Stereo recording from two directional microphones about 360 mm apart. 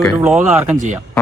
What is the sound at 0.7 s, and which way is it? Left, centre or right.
Speech, right.